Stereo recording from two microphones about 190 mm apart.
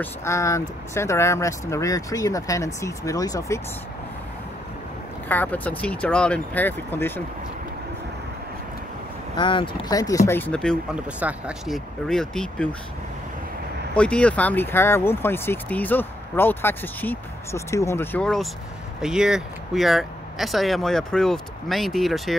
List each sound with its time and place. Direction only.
0.0 s speech: 15° left (ahead or behind)
5.3 s speech: 10° left (ahead or behind)
9.4 s speech: 25° left (ahead or behind); by 10.8 s 5° left (ahead or behind)
11.1 s speech: 5° right (ahead or behind)
13.9 s speech: 5° left (ahead or behind)